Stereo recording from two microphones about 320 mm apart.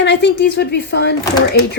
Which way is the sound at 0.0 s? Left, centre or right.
Left.